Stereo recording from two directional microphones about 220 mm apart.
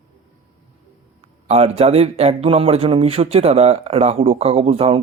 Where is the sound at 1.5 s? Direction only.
25° right (ahead or behind).